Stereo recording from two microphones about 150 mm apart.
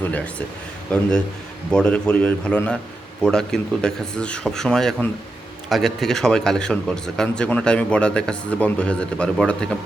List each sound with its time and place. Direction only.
0.0 s a man's voice: 10° left (ahead or behind)